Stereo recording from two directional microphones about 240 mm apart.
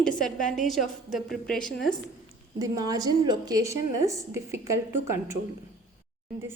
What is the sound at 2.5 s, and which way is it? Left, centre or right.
A woman's voice, centre.